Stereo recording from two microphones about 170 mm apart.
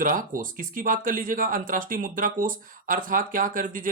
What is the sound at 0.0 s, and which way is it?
Speech, 50° right (ahead or behind).